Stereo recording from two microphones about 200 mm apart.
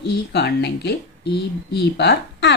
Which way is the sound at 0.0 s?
60° left (ahead or behind).